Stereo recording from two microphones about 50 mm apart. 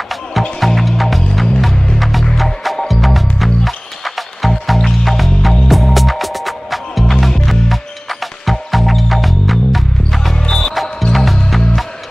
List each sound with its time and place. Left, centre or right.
0.1 s music: centre
10.3 s music: centre
10.7 s music: centre